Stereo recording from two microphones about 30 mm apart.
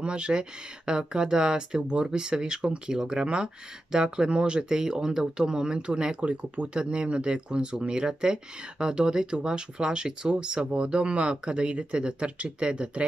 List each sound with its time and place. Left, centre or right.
0.0 s speech: right
1.8 s speech: right
2.0 s speech: right
6.2 s speech: right
6.7 s speech: right